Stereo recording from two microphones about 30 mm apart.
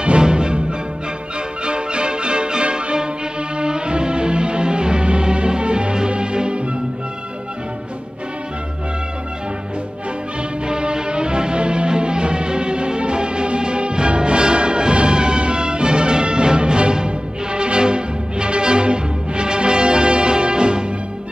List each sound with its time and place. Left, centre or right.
0.2 s music: right
10.7 s music: right